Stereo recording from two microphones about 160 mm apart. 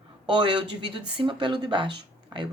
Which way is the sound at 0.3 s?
30° right (ahead or behind).